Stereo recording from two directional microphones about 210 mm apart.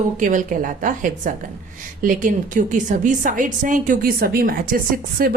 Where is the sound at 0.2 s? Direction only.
40° right (ahead or behind).